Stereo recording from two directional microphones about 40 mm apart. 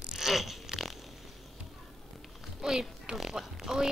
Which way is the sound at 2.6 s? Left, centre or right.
Centre.